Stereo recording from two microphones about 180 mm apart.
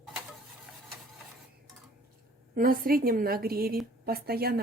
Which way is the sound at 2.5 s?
55° right (ahead or behind).